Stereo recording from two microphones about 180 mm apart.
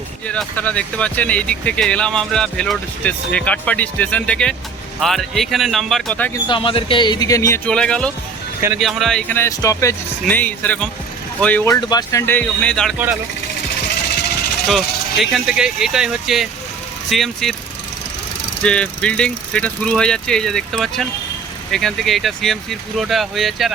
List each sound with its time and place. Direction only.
0.3 s speech: 5° left (ahead or behind)
6.5 s speech: 30° left (ahead or behind); by 11.8 s 10° left (ahead or behind)
11.8 s speech: 20° left (ahead or behind); by 13.0 s 5° left (ahead or behind)
14.7 s speech: centre (ahead or behind)
18.6 s speech: 5° left (ahead or behind)